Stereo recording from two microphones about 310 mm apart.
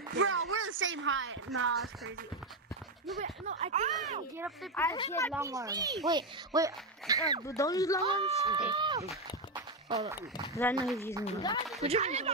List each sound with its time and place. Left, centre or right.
0.1 s speech: right
3.2 s speech: right
4.7 s speech: centre
5.3 s speech: centre
7.4 s speech: centre
8.0 s speech: centre
10.5 s speech: centre
11.8 s speech: right